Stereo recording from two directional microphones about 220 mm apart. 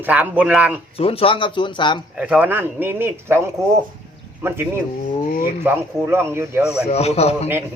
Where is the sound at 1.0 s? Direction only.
25° left (ahead or behind).